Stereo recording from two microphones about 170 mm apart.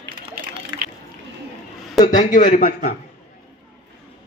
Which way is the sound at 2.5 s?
55° left (ahead or behind).